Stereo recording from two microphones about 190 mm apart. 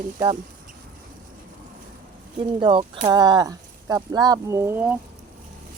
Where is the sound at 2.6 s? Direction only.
25° right (ahead or behind); by 4.9 s 10° right (ahead or behind).